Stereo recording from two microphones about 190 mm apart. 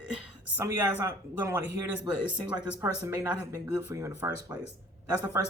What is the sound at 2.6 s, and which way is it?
Speech, 10° right (ahead or behind).